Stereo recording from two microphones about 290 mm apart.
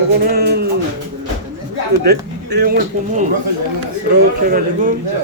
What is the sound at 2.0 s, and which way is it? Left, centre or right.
Speech, right.